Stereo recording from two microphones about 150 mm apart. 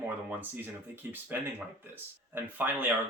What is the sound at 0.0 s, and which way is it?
Speech, 10° right (ahead or behind).